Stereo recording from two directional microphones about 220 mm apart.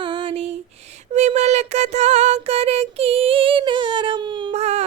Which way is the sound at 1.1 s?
30° right (ahead or behind).